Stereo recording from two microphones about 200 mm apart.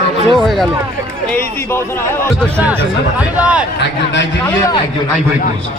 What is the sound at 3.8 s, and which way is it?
Speech, 60° left (ahead or behind).